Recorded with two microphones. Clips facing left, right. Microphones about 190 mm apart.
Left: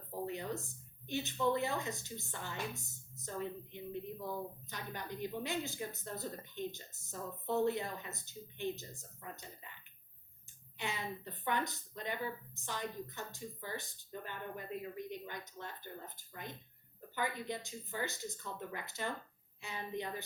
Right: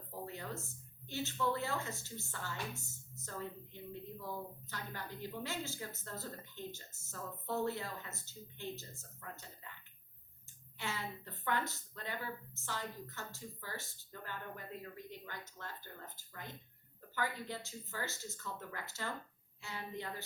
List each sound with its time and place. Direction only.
0.3 s speech: 20° left (ahead or behind)
10.8 s speech: 15° left (ahead or behind)